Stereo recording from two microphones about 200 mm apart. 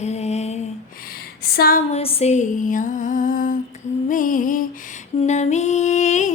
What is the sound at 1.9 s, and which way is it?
Female singing, 30° left (ahead or behind).